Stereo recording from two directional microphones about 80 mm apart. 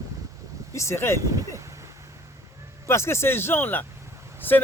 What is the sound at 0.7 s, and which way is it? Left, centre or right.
Speech, left.